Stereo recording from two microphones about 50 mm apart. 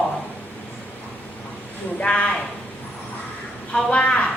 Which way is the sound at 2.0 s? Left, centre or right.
Left.